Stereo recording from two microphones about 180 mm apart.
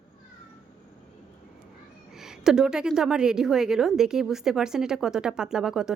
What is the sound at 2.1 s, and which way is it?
A woman's voice, centre (ahead or behind).